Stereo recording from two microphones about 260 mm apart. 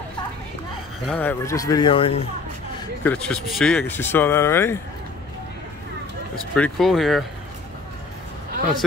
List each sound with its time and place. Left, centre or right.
1.0 s speech: centre
3.0 s speech: centre
6.5 s speech: centre